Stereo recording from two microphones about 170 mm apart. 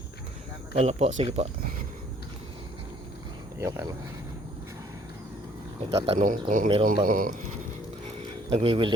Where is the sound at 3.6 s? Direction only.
20° right (ahead or behind).